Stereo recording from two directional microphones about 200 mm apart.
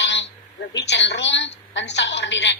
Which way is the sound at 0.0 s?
60° left (ahead or behind).